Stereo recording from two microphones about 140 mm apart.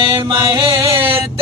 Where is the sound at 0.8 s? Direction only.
40° right (ahead or behind).